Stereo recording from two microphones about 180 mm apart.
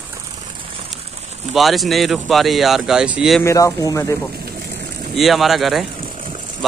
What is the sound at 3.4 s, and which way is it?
Speech, 15° left (ahead or behind).